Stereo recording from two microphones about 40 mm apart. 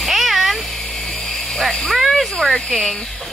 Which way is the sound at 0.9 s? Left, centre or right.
Centre.